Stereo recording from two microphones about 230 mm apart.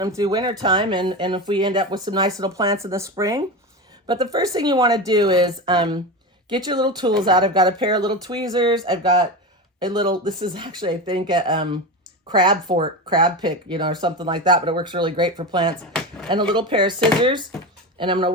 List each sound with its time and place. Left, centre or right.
0.0 s speech: centre
15.9 s a sound: centre
16.3 s speech: centre